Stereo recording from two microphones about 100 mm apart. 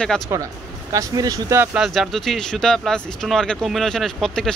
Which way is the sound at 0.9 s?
35° right (ahead or behind).